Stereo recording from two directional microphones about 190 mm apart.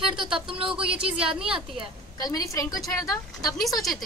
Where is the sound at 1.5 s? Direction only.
25° right (ahead or behind).